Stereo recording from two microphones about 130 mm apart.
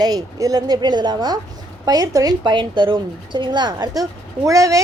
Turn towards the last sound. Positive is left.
turn(degrees=-25)  # may be behind; listen again after turning